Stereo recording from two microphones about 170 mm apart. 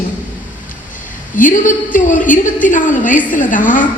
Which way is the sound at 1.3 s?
50° left (ahead or behind).